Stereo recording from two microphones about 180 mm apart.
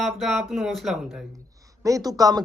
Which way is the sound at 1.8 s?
20° right (ahead or behind).